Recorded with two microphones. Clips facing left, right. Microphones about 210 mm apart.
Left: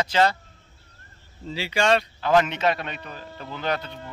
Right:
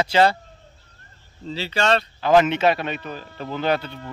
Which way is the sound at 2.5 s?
10° right (ahead or behind).